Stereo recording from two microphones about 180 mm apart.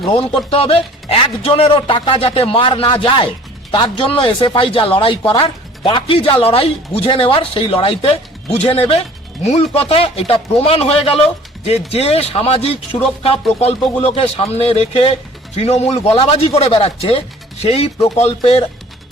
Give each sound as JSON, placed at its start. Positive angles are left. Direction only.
{"t": 0.0, "sound": "speech", "side_deg": 30}